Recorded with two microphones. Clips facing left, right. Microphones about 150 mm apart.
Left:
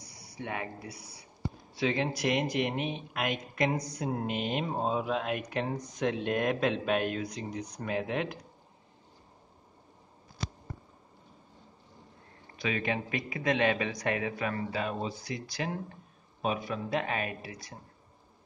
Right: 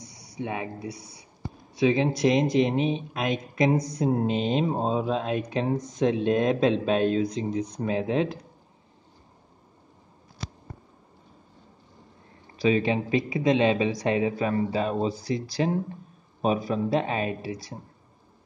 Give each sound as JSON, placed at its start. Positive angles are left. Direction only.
{"t": 0.0, "sound": "speech", "side_deg": -25}
{"t": 12.5, "sound": "speech", "side_deg": -30}